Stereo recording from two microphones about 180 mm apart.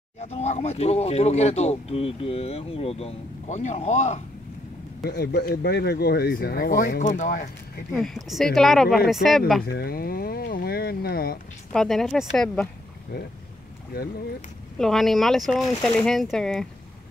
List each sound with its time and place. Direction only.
0.2 s speech: 35° left (ahead or behind)
5.0 s speech: 65° left (ahead or behind); by 7.4 s 45° left (ahead or behind)
7.9 s speech: centre (ahead or behind)
9.7 s speech: 60° left (ahead or behind)
11.7 s speech: centre (ahead or behind)
14.8 s speech: centre (ahead or behind)